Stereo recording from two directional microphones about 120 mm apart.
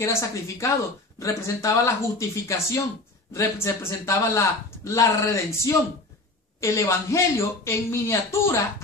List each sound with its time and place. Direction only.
0.0 s a man's voice: 25° left (ahead or behind)